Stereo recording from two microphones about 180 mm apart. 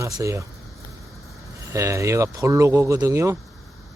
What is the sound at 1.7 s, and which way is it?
Speech, 15° right (ahead or behind).